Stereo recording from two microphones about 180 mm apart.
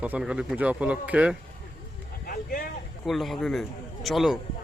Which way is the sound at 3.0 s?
Centre (ahead or behind).